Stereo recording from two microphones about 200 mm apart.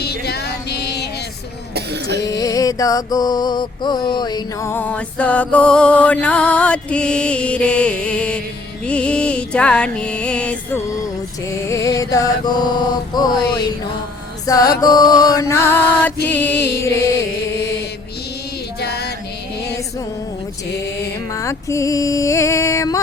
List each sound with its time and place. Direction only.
0.0 s music: 55° left (ahead or behind)
2.2 s mantra: 15° left (ahead or behind)
8.9 s music: 5° left (ahead or behind)
11.7 s mantra: 15° left (ahead or behind)
14.4 s mantra: 15° left (ahead or behind)
21.3 s mantra: 15° left (ahead or behind)